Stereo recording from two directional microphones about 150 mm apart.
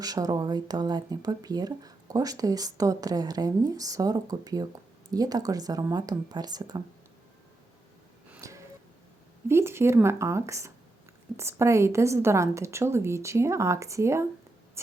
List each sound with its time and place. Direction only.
0.0 s speech: 25° right (ahead or behind)
8.4 s a sound: 20° right (ahead or behind)
9.5 s speech: 15° right (ahead or behind)